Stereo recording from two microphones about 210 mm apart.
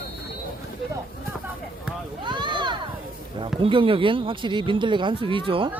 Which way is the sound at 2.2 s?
20° right (ahead or behind).